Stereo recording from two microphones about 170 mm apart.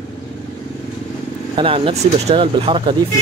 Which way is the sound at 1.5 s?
30° right (ahead or behind).